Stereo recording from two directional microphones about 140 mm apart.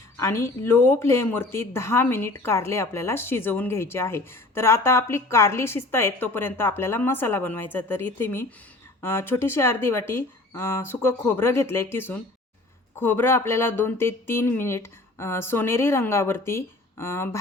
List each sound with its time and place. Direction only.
0.2 s speech: 20° left (ahead or behind)